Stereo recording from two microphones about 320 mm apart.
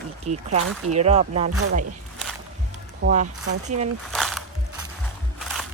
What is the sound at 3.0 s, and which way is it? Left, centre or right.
Speech, right.